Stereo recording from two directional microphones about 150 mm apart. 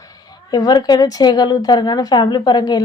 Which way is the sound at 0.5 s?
25° left (ahead or behind).